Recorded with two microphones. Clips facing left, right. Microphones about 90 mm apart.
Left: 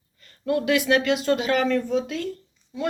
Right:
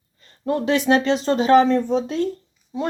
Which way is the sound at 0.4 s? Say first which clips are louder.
Right 2 dB; 30° right (ahead or behind).